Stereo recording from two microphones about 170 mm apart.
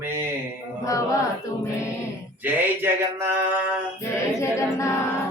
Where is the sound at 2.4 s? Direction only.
15° right (ahead or behind).